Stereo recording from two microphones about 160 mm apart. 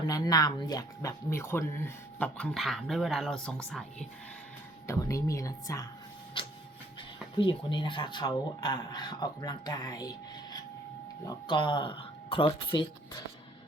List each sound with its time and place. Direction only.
0.0 s speech: 25° left (ahead or behind); by 3.8 s 5° left (ahead or behind)
4.9 s speech: 20° left (ahead or behind)
6.4 s printer: 30° left (ahead or behind)
7.3 s speech: 30° left (ahead or behind)